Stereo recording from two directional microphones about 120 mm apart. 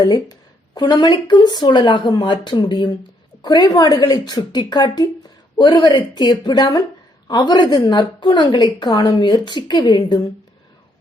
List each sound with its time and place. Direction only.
0.0 s speech: 30° left (ahead or behind)